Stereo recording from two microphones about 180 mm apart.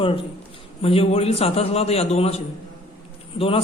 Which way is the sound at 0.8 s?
35° left (ahead or behind).